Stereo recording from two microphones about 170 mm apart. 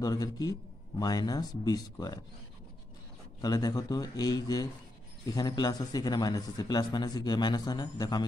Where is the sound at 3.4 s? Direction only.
20° left (ahead or behind).